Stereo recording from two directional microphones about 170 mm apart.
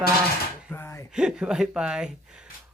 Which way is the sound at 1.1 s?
5° right (ahead or behind).